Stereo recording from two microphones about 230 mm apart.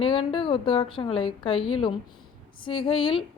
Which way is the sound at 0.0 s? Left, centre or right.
Left.